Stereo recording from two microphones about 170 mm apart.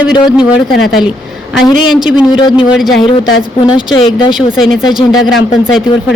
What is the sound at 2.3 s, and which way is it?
Speech, 30° left (ahead or behind).